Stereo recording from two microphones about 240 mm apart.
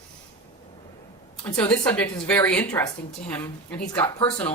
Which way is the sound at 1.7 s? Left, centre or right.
Centre.